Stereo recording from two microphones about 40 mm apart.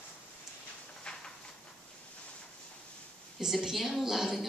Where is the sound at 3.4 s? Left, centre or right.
Centre.